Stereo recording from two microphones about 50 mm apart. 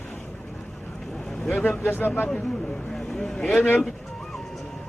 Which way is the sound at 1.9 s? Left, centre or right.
Left.